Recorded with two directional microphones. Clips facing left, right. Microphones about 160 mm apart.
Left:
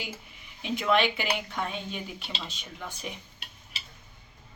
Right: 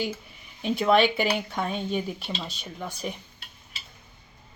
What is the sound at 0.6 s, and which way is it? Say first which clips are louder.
Speech: right 5 dB; 35° right (ahead or behind).